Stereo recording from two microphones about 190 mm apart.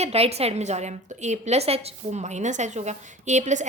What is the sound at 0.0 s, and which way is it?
A woman's voice, 35° right (ahead or behind).